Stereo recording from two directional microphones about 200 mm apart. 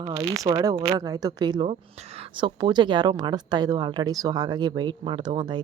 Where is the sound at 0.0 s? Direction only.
25° right (ahead or behind).